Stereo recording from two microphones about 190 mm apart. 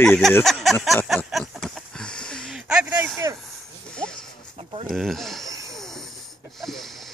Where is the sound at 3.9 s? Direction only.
5° left (ahead or behind).